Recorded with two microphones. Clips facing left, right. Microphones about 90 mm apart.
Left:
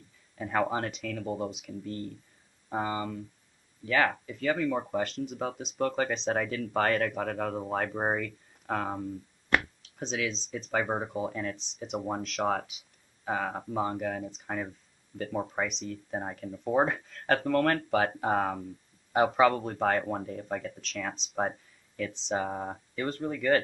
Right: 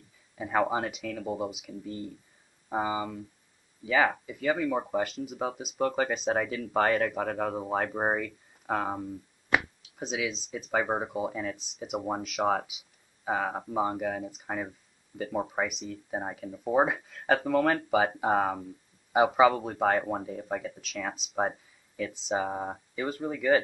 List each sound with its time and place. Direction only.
0.4 s speech: 10° right (ahead or behind)